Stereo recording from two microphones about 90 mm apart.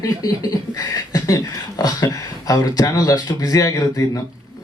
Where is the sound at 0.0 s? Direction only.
40° left (ahead or behind).